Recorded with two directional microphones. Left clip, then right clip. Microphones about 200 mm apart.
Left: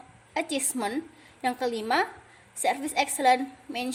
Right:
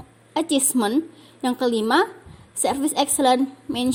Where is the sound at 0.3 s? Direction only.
30° right (ahead or behind).